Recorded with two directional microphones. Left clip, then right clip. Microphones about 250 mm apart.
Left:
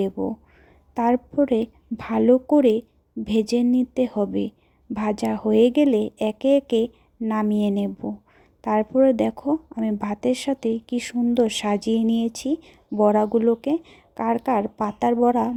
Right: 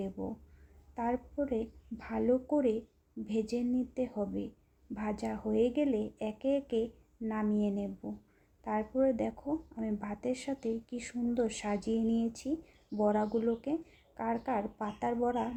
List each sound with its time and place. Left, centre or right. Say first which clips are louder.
0.2 s speech: left 14 dB; left